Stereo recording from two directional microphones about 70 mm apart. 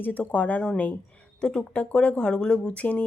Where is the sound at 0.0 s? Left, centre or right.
Left.